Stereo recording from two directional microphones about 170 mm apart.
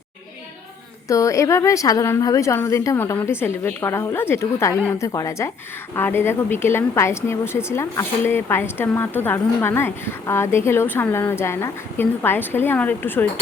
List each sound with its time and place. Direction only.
1.0 s a woman's voice: 20° left (ahead or behind)